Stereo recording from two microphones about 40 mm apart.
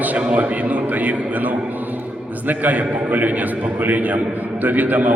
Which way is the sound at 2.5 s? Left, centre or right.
Right.